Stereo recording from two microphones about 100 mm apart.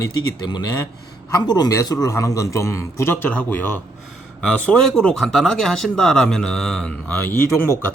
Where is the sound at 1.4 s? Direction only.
45° left (ahead or behind); by 3.8 s 20° left (ahead or behind).